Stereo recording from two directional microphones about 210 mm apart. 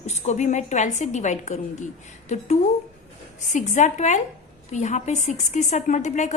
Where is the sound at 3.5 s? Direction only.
35° left (ahead or behind).